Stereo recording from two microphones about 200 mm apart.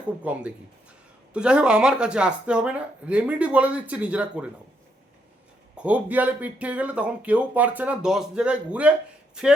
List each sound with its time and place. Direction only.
0.3 s speech: 10° right (ahead or behind)
5.7 s speech: 5° right (ahead or behind)